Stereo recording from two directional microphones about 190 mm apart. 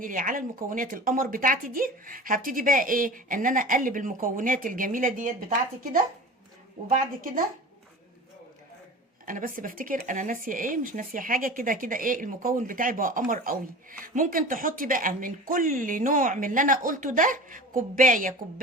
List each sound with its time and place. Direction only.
0.0 s speech: 45° right (ahead or behind)
6.8 s speech: 45° right (ahead or behind)
9.2 s speech: 45° right (ahead or behind)